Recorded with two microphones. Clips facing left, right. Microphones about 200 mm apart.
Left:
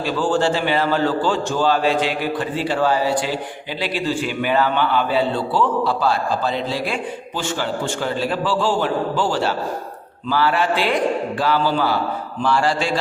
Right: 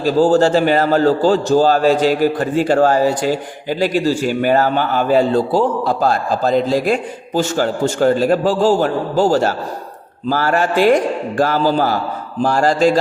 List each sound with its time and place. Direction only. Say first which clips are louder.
0.0 s a man's voice: right 7 dB; 40° right (ahead or behind)